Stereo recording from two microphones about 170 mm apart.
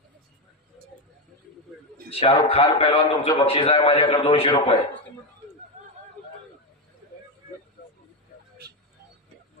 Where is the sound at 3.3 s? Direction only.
35° left (ahead or behind).